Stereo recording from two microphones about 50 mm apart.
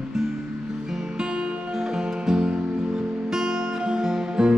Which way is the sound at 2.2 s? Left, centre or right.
Centre.